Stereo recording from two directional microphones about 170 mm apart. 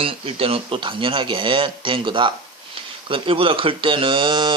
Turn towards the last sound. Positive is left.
turn(degrees=-30)  # may be behind; listen again after turning